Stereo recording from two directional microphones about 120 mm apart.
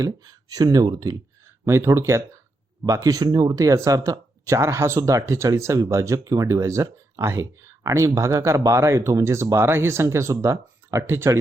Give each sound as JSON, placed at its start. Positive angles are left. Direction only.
{"t": 0.0, "sound": "speech", "side_deg": -35}